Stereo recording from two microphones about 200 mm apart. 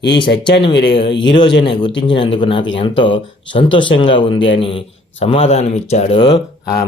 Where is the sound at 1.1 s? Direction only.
65° left (ahead or behind).